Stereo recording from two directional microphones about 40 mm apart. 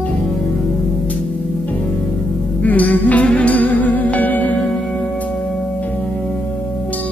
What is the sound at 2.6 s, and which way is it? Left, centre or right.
Music, left.